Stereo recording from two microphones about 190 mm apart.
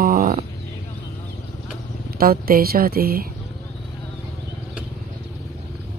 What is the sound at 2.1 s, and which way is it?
Speech, 50° right (ahead or behind).